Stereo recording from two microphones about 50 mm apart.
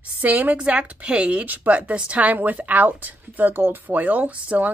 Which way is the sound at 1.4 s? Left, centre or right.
Right.